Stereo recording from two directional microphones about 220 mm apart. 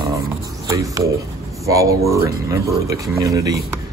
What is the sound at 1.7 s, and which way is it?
Speech, 15° right (ahead or behind).